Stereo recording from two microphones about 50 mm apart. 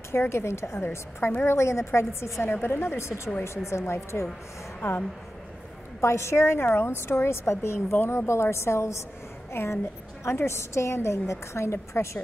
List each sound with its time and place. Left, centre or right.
0.1 s a woman's voice: left
2.5 s a woman's voice: left
5.9 s a woman's voice: left
9.5 s a woman's voice: left